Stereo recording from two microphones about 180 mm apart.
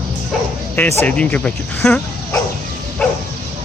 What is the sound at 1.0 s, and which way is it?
Speech, 5° left (ahead or behind).